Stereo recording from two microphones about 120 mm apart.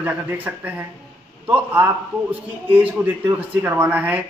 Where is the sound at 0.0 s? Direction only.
15° right (ahead or behind).